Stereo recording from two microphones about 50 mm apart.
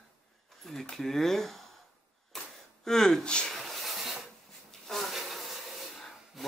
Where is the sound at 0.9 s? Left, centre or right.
Centre.